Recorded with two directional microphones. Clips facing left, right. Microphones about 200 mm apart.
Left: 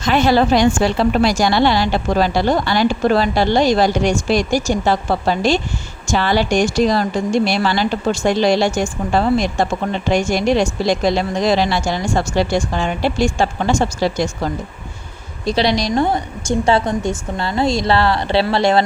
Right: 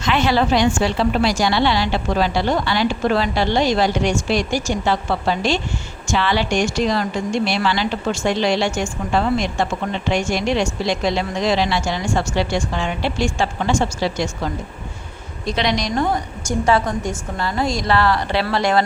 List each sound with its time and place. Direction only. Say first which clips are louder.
0.0 s a woman's voice: left 4 dB; 40° left (ahead or behind)